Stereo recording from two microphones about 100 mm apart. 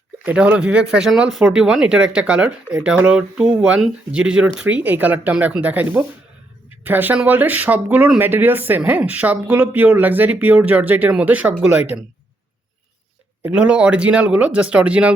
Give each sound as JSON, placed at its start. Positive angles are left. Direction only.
{"t": 0.3, "sound": "speech", "side_deg": -15}
{"t": 13.4, "sound": "speech", "side_deg": -10}